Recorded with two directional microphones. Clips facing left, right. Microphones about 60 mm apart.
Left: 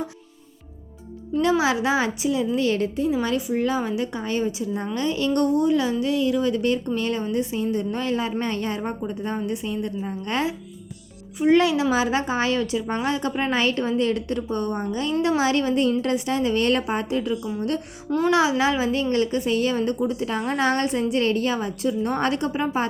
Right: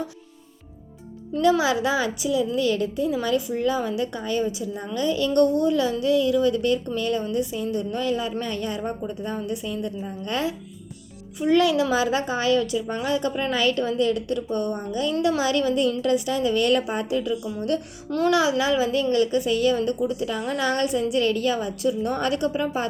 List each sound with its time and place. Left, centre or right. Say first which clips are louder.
1.4 s a child's voice: right 1 dB; left